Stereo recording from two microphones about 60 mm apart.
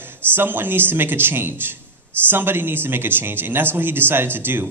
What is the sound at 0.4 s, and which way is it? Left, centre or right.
A man's voice, right.